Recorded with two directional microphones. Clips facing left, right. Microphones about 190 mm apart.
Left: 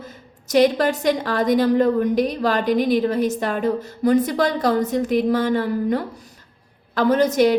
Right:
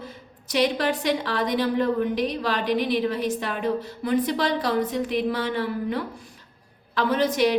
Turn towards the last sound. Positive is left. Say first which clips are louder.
# left 5 dB
turn(degrees=45)  # may be behind; listen again after turning